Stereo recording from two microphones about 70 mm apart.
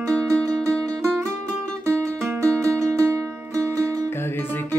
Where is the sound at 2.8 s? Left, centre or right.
Right.